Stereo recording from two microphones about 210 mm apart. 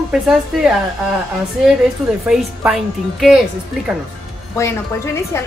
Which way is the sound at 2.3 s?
Centre (ahead or behind).